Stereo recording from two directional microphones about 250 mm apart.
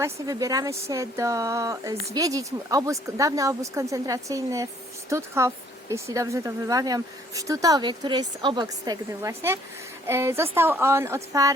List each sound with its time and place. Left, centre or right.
0.0 s speech: centre